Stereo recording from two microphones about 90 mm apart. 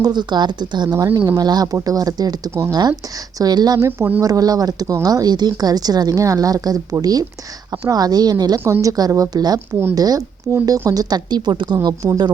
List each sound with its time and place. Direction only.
0.0 s speech: 55° right (ahead or behind)
0.9 s a woman's voice: 40° right (ahead or behind)
3.8 s speech: 30° right (ahead or behind)
4.2 s a woman's voice: 40° right (ahead or behind)
8.6 s a woman's voice: 35° right (ahead or behind)
10.5 s speech: 15° left (ahead or behind)
10.8 s a woman's voice: 45° right (ahead or behind)